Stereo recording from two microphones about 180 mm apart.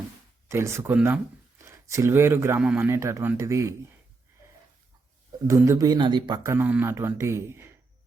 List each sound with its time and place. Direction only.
0.4 s speech: 15° right (ahead or behind)
5.5 s speech: 15° right (ahead or behind)